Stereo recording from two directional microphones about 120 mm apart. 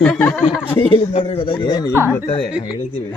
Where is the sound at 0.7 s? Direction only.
50° left (ahead or behind).